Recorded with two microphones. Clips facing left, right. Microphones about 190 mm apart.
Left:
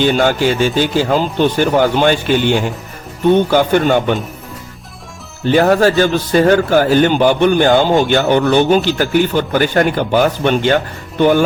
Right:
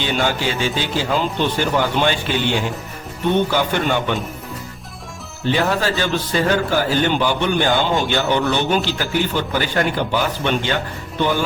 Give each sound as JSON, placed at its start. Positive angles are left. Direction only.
{"t": 0.0, "sound": "speech", "side_deg": 50}
{"t": 5.5, "sound": "speech", "side_deg": 50}